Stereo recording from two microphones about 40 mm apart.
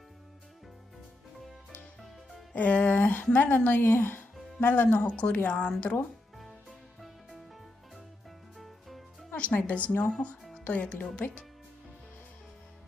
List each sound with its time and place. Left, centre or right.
2.5 s music: left
2.9 s speech: left
4.6 s speech: left
5.0 s speech: left
5.9 s speech: left
8.5 s music: centre
9.3 s speech: left